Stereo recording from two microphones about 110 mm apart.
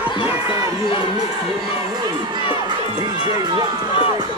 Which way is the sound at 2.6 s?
40° right (ahead or behind).